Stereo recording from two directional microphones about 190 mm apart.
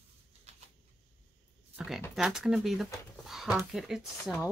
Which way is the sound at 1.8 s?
Centre (ahead or behind).